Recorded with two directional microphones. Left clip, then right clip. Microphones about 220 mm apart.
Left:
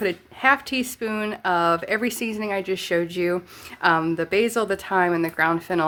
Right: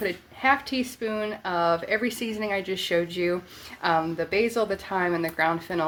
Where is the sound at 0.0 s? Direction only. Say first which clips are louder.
Left 4 dB; 30° left (ahead or behind).